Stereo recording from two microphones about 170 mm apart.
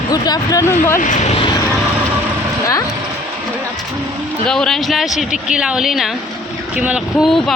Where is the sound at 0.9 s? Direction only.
50° left (ahead or behind).